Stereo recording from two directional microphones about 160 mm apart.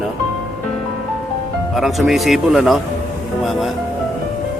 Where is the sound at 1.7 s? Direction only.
Centre (ahead or behind).